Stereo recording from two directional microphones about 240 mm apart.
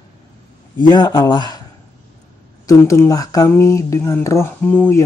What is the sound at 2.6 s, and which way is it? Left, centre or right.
Speech, centre.